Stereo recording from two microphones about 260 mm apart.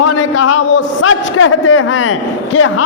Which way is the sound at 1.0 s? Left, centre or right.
Left.